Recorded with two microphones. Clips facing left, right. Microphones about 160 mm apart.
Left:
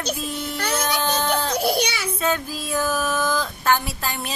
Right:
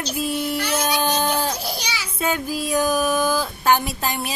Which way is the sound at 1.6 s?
60° left (ahead or behind).